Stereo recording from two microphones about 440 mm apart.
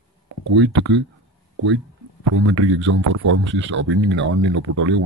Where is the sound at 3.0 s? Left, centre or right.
Right.